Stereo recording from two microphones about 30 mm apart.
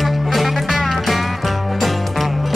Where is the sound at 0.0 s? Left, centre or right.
Centre.